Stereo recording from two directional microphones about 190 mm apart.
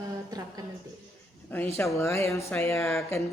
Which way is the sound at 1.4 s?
10° left (ahead or behind).